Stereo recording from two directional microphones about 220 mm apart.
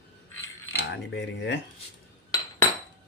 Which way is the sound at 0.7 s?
50° left (ahead or behind).